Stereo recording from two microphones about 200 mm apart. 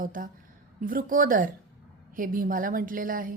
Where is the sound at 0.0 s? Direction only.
45° right (ahead or behind).